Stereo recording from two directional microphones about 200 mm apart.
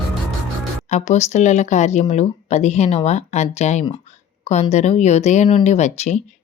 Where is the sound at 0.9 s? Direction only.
35° left (ahead or behind).